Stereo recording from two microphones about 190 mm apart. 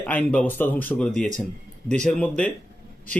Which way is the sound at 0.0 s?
10° left (ahead or behind).